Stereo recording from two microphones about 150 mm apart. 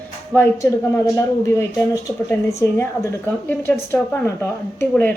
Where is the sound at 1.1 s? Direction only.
15° left (ahead or behind).